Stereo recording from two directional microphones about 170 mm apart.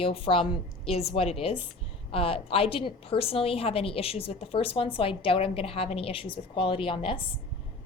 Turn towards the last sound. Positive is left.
turn(degrees=30)  # may be behind; listen again after turning